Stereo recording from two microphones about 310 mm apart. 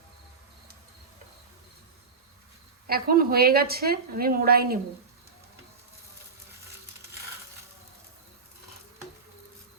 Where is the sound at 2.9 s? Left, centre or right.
Right.